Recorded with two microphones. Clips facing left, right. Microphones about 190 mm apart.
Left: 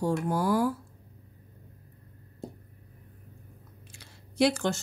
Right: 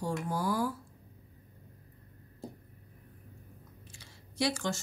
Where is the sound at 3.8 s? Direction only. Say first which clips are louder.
Left 2 dB; 65° left (ahead or behind).